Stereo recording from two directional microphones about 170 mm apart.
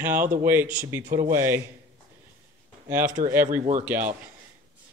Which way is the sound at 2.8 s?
10° right (ahead or behind).